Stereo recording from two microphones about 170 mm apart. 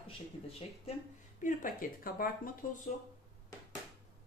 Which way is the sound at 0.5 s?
35° left (ahead or behind).